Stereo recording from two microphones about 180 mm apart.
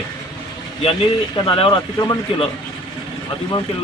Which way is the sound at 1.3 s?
30° left (ahead or behind).